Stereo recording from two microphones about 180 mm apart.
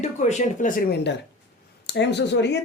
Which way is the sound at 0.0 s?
40° left (ahead or behind).